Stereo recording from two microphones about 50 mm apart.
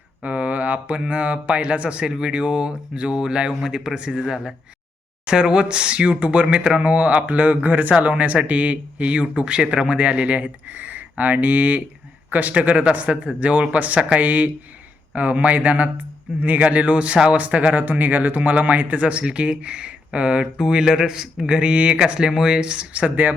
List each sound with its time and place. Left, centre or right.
0.2 s speech: right; by 3.9 s centre
3.9 s speech: centre; by 23.3 s right